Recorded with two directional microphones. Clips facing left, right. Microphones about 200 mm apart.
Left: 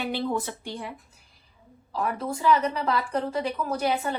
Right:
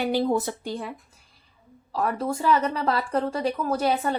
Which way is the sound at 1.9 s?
40° right (ahead or behind).